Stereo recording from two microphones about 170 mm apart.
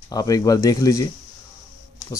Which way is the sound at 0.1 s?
20° left (ahead or behind).